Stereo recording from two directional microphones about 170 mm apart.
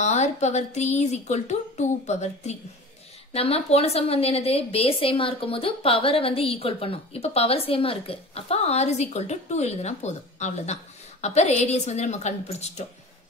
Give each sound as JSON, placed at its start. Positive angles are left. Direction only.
{"t": 0.0, "sound": "a woman's voice", "side_deg": 40}